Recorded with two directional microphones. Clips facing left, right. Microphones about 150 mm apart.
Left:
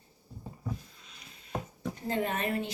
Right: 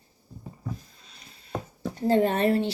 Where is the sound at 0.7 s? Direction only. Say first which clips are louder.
Left 1 dB; 35° right (ahead or behind).